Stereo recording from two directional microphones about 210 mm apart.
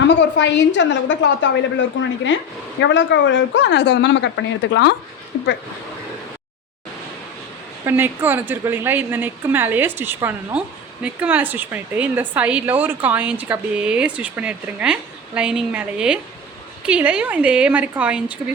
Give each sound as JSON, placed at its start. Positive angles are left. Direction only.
{"t": 0.1, "sound": "speech", "side_deg": 60}
{"t": 2.8, "sound": "speech", "side_deg": 55}
{"t": 7.9, "sound": "a woman's voice", "side_deg": -10}